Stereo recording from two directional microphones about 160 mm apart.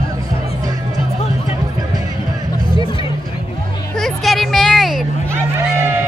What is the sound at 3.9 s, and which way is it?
Music, centre (ahead or behind).